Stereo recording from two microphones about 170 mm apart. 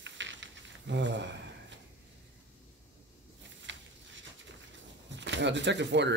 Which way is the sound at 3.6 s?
90° right.